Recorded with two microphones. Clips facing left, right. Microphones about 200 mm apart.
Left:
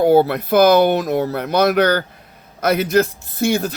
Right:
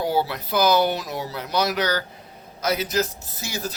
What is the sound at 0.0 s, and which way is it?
Speech, 55° left (ahead or behind).